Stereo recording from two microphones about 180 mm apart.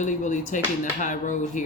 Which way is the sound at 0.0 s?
45° left (ahead or behind).